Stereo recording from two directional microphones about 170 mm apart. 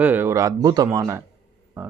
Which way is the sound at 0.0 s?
10° right (ahead or behind).